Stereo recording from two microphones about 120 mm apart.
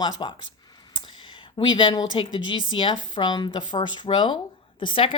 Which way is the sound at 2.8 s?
40° left (ahead or behind).